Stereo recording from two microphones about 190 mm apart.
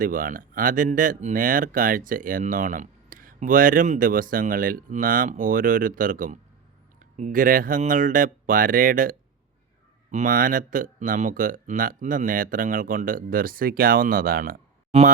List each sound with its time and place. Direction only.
0.0 s speech: 45° right (ahead or behind)
14.9 s speech: 35° right (ahead or behind)